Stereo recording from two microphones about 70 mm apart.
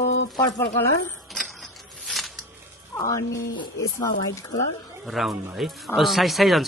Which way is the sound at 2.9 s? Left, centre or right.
Left.